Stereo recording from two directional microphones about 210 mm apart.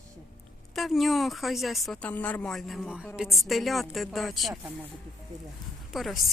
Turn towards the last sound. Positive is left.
turn(degrees=0)  # may be behind; listen again after turning